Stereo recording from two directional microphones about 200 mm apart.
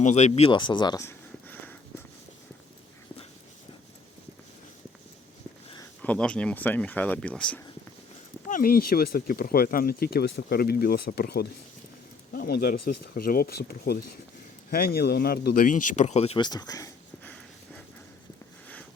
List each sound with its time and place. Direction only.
0.0 s speech: 35° left (ahead or behind); by 1.7 s 10° left (ahead or behind)
6.0 s speech: 5° left (ahead or behind)
8.4 s speech: 45° left (ahead or behind); by 17.8 s 10° left (ahead or behind)